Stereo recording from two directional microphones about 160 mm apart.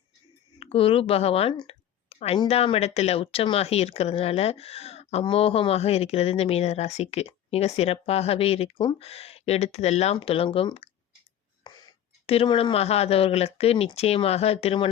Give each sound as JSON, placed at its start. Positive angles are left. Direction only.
{"t": 0.6, "sound": "a woman's voice", "side_deg": 35}
{"t": 11.6, "sound": "whispering", "side_deg": 25}
{"t": 12.2, "sound": "speech", "side_deg": 35}